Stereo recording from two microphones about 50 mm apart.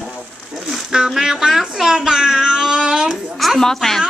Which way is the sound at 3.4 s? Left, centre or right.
Centre.